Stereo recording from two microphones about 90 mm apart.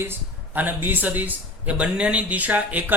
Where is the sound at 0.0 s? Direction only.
25° right (ahead or behind).